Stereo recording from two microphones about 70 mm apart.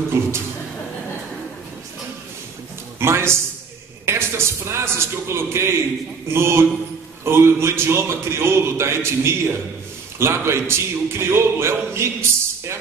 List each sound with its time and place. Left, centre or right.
0.1 s a man's voice: right
3.0 s a man's voice: right